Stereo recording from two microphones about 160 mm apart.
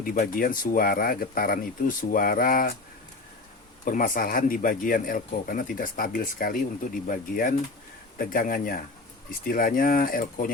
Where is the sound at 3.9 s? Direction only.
60° left (ahead or behind).